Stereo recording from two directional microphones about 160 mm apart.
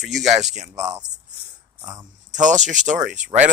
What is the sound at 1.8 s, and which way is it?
Speech, 20° right (ahead or behind).